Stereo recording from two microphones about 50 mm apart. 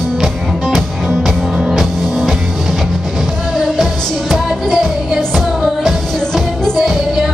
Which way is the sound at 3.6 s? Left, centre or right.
Centre.